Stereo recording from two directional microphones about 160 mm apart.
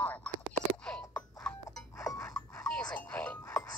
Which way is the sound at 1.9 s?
20° left (ahead or behind).